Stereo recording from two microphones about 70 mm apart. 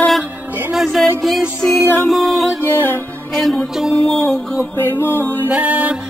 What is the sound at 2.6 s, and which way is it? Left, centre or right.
Music, left.